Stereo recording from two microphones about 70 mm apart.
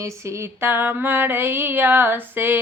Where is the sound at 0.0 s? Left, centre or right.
Right.